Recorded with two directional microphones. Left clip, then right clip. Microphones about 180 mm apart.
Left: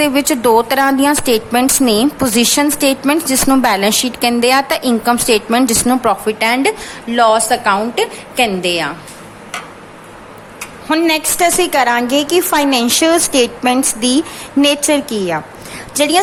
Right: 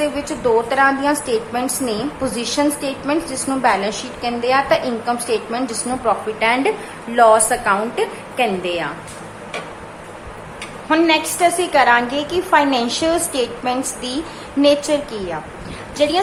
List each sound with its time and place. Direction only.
0.0 s a woman's voice: 55° left (ahead or behind); by 8.4 s 35° left (ahead or behind)
8.6 s a woman's voice: 60° left (ahead or behind)
10.8 s a woman's voice: 45° left (ahead or behind)